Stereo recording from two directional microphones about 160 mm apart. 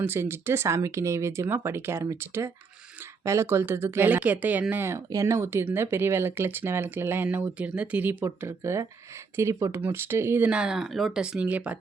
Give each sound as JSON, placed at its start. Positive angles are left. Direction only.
{"t": 0.0, "sound": "speech", "side_deg": -15}